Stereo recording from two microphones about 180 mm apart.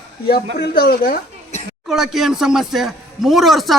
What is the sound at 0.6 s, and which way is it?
Speech, 60° left (ahead or behind).